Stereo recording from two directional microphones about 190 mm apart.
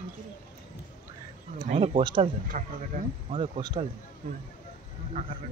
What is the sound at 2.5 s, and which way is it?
Speech, 45° right (ahead or behind).